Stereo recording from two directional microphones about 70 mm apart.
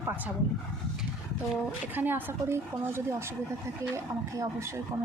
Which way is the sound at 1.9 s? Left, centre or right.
Right.